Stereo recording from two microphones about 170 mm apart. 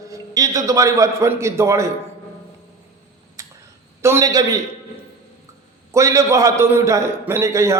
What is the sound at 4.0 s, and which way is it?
Speech, 15° right (ahead or behind).